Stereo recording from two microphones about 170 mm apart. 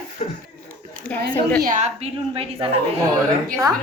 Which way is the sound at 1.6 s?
50° right (ahead or behind).